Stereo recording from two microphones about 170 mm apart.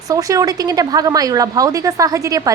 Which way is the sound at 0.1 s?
20° right (ahead or behind).